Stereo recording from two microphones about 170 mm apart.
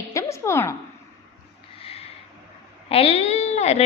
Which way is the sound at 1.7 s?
35° left (ahead or behind).